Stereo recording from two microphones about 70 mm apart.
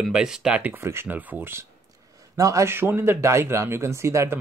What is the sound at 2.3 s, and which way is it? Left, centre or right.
Speech, right.